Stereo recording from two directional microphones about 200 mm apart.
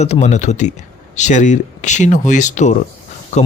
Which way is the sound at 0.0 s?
35° left (ahead or behind).